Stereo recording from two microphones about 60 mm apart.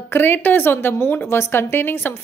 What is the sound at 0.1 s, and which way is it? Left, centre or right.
A woman's voice, left.